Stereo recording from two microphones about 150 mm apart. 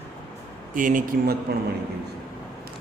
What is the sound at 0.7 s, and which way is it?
Speech, 60° right (ahead or behind).